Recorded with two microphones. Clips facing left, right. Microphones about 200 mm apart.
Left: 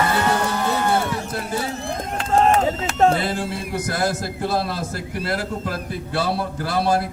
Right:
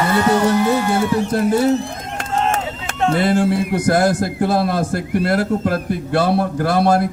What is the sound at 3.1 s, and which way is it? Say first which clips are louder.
Speech: right 8 dB; 50° right (ahead or behind).